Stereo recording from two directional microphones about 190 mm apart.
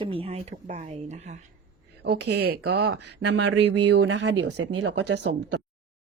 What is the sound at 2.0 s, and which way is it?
Speech, 60° right (ahead or behind).